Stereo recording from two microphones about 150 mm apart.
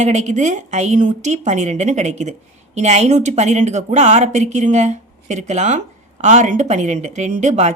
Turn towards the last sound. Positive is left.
turn(degrees=-50)  # may be behind; listen again after turning